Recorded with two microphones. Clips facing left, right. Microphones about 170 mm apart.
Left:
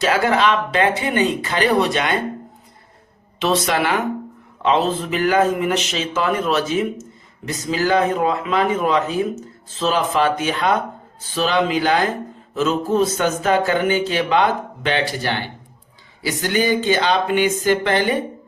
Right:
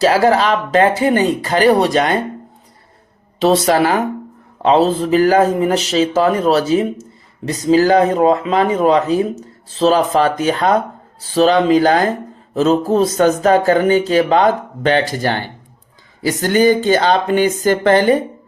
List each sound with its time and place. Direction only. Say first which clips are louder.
0.0 s speech: right 5 dB; 35° right (ahead or behind)
3.4 s speech: right 6 dB; 35° right (ahead or behind)